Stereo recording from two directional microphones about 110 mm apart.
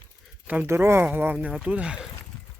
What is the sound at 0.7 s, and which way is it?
Speech, 20° right (ahead or behind).